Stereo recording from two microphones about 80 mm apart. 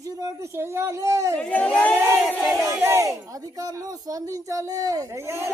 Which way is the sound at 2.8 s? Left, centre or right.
Right.